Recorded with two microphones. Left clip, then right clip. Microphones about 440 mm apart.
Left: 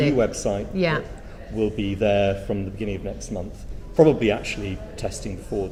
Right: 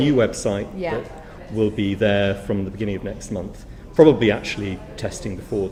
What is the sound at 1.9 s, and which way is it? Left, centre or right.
Speech, centre.